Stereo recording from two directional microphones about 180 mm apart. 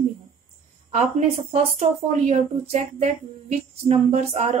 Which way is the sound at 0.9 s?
40° right (ahead or behind).